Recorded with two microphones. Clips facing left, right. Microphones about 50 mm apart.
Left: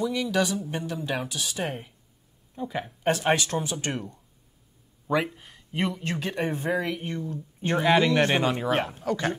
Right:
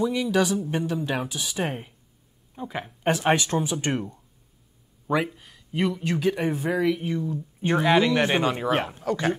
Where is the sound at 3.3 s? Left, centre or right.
Right.